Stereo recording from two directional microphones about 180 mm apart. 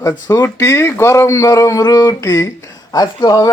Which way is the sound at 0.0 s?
15° left (ahead or behind).